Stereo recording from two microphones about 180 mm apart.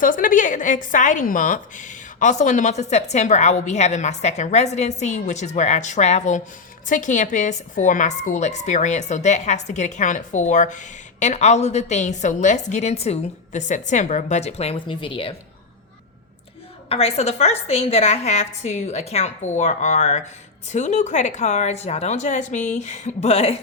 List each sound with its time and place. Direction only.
0.0 s a woman's voice: 50° left (ahead or behind); by 15.4 s 30° left (ahead or behind)
16.9 s a woman's voice: 35° left (ahead or behind)